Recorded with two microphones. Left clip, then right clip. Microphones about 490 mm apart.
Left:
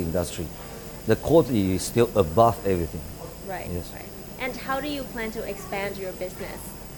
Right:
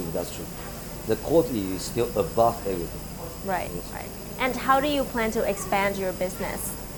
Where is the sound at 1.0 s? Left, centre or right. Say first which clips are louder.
Left 3 dB; left.